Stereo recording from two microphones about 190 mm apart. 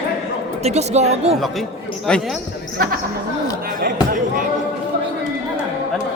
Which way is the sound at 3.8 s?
45° right (ahead or behind).